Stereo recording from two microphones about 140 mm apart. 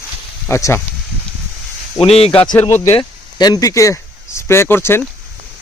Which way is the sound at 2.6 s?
15° left (ahead or behind).